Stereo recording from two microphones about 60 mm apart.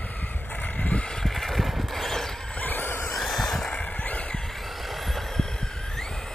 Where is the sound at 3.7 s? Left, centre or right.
Left.